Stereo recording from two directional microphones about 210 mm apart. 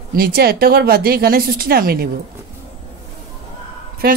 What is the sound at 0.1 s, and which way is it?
Speech, 45° right (ahead or behind).